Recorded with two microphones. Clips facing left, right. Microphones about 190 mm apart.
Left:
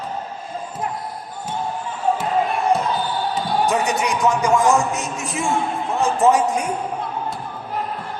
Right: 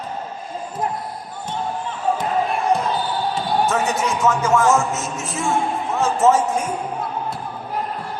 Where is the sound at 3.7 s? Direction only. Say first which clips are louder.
Left 1 dB; 15° left (ahead or behind).